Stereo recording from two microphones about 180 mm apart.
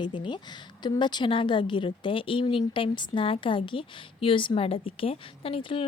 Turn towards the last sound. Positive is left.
turn(degrees=30)  # may be behind; listen again after turning